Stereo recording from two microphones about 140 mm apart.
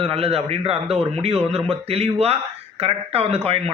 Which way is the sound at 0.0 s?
45° right (ahead or behind).